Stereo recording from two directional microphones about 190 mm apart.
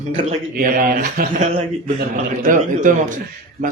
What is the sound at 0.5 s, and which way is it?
Speech, 45° right (ahead or behind).